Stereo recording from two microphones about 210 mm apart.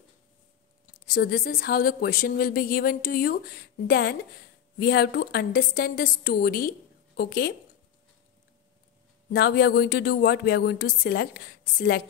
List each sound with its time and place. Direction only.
1.0 s speech: 45° left (ahead or behind)
9.3 s speech: 50° left (ahead or behind)